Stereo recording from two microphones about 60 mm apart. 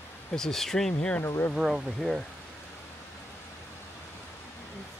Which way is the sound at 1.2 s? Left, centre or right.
Left.